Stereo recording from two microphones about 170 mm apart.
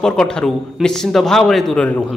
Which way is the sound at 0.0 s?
5° left (ahead or behind).